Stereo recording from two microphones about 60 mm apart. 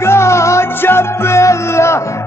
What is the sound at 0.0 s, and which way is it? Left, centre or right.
Music, left.